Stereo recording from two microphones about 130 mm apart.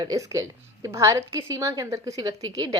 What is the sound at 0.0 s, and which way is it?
A woman's voice, 30° right (ahead or behind).